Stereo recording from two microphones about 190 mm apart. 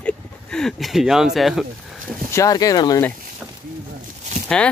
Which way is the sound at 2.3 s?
20° left (ahead or behind).